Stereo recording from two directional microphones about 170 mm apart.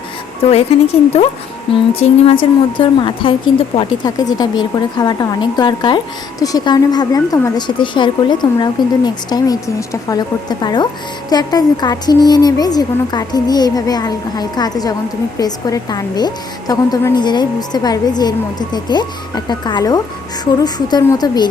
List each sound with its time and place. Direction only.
0.7 s speech: 35° left (ahead or behind)
2.0 s a woman's voice: 30° left (ahead or behind)